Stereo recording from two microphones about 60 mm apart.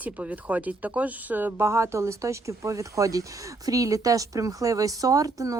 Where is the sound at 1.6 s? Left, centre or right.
Right.